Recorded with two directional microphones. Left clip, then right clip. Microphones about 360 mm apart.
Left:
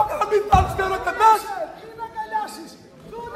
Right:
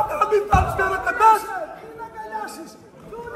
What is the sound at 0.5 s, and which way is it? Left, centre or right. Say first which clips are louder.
Music: left 1 dB; left.